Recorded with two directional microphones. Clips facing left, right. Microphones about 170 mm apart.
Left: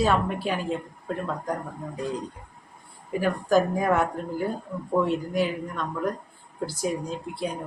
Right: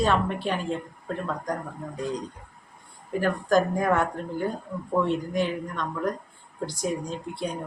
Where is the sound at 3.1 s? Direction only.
5° left (ahead or behind).